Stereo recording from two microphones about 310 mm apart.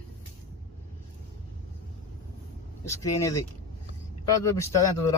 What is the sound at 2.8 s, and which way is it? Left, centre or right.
Speech, centre.